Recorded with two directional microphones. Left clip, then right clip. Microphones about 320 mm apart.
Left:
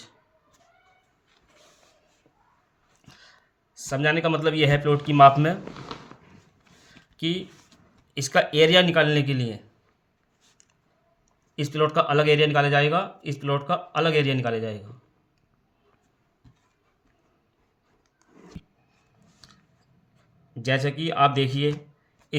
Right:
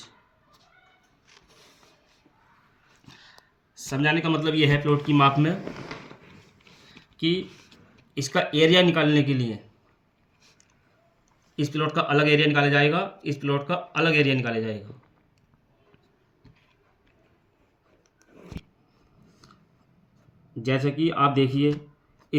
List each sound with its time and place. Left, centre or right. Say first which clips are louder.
3.1 s dog: right 1 dB; left
3.8 s speech: left 1 dB; left
8.1 s speech: left 3 dB; left
11.5 s speech: left 3 dB; left
18.5 s a sound: right 7 dB; centre
20.6 s speech: right 1 dB; left